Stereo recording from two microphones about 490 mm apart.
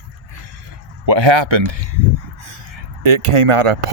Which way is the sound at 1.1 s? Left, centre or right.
Right.